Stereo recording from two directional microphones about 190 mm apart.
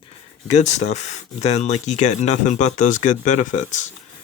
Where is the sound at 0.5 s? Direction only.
35° left (ahead or behind).